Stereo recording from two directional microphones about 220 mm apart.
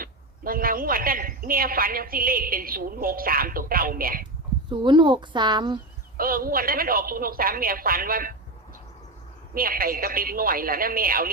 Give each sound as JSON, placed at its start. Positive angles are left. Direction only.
{"t": 0.0, "sound": "a woman's voice", "side_deg": -40}
{"t": 4.7, "sound": "speech", "side_deg": -20}
{"t": 6.1, "sound": "a woman's voice", "side_deg": -40}
{"t": 9.6, "sound": "a woman's voice", "side_deg": -40}